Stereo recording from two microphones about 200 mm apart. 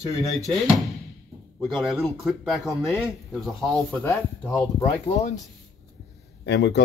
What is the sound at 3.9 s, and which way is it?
Speech, 10° left (ahead or behind).